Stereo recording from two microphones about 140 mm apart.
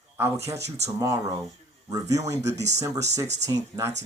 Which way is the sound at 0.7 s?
50° right (ahead or behind).